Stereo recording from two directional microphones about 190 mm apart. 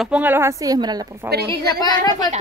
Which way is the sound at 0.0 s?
10° right (ahead or behind).